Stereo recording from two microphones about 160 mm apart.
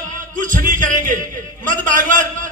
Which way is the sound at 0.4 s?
55° right (ahead or behind).